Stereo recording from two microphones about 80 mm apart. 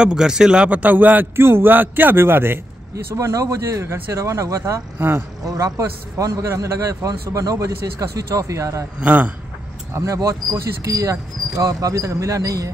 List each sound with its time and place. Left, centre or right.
0.0 s a man's voice: centre; by 2.6 s right
3.1 s speech: right
4.9 s a man's voice: right
5.4 s a man's voice: right
9.0 s a man's voice: centre
9.9 s a man's voice: right